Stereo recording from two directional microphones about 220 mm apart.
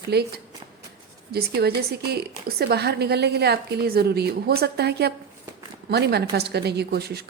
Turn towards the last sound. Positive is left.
turn(degrees=-45)  # may be behind; listen again after turning